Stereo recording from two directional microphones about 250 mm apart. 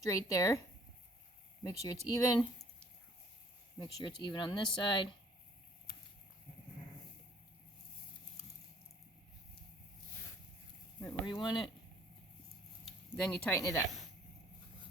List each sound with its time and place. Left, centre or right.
0.0 s speech: centre
1.6 s speech: centre
3.8 s speech: centre
11.0 s speech: centre
12.8 s speech: centre